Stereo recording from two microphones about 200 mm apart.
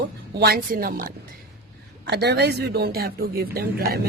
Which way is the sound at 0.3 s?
50° right (ahead or behind).